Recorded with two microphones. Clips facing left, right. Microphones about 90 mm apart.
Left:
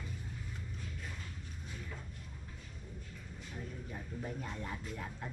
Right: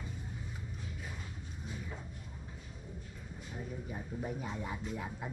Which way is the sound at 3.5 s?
10° right (ahead or behind).